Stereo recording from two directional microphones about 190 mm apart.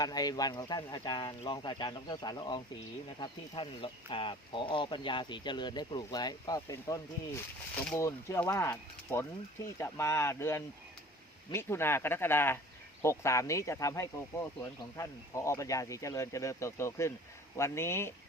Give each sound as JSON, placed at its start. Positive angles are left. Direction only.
{"t": 0.0, "sound": "speech", "side_deg": 20}